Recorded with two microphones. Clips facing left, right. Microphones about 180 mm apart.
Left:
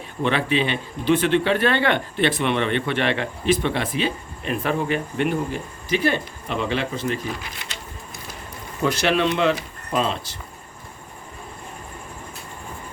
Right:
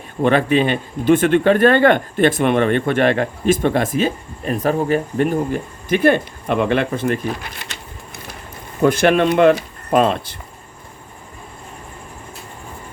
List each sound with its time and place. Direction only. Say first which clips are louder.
0.2 s speech: right 6 dB; 50° right (ahead or behind)
8.8 s speech: right 6 dB; 50° right (ahead or behind)